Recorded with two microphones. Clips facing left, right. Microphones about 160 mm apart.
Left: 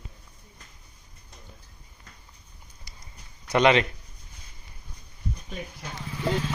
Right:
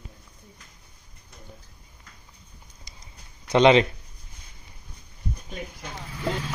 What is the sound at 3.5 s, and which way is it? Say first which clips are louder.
Speech: right 4 dB; 25° right (ahead or behind).